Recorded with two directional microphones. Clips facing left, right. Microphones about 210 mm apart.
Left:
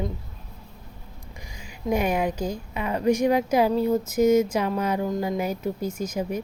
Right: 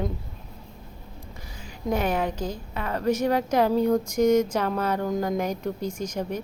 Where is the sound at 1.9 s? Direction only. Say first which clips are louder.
Left 2 dB; 10° left (ahead or behind).